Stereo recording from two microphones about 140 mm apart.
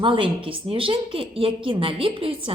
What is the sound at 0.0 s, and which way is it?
A woman's voice, 40° right (ahead or behind).